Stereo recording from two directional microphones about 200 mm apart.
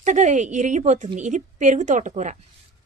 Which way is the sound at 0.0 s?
40° right (ahead or behind).